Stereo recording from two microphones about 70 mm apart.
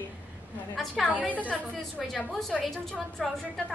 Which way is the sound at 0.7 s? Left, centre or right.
Centre.